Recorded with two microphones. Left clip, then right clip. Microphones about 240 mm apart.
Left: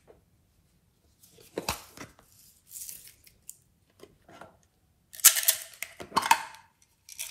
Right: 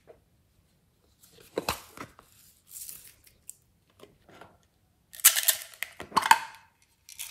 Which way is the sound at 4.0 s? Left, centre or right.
Centre.